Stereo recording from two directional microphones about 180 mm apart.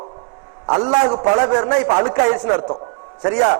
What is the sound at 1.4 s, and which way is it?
Speech, 25° right (ahead or behind).